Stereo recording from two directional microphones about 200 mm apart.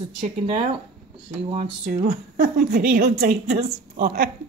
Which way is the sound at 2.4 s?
50° right (ahead or behind).